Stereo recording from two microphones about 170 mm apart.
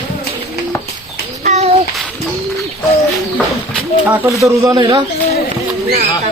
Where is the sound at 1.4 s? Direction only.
40° right (ahead or behind).